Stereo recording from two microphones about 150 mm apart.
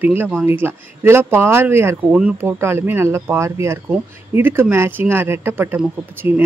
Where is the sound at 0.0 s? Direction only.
15° right (ahead or behind).